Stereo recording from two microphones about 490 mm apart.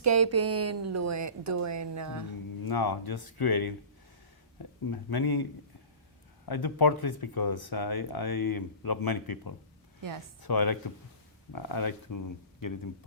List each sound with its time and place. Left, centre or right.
0.0 s a woman's voice: right
2.6 s speech: left
4.9 s speech: left